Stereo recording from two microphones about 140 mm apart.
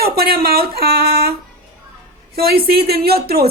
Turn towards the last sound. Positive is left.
turn(degrees=-90)